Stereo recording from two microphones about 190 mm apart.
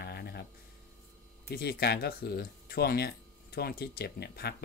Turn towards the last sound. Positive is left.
turn(degrees=60)  # may be behind; listen again after turning